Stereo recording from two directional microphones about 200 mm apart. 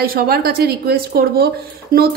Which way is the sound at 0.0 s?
50° right (ahead or behind).